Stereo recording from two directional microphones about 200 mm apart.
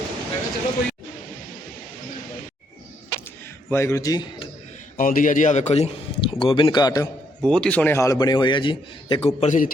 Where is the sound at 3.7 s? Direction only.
15° left (ahead or behind).